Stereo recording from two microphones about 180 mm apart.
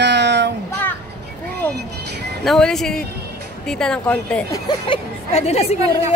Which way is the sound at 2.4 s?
Centre (ahead or behind).